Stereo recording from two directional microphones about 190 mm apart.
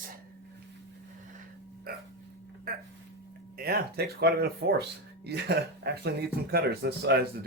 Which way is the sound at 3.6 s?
55° right (ahead or behind).